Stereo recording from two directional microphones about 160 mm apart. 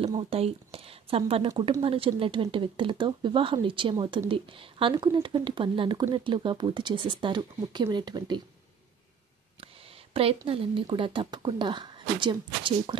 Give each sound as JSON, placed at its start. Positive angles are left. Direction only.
{"t": 0.0, "sound": "speech", "side_deg": -35}
{"t": 10.1, "sound": "speech", "side_deg": -35}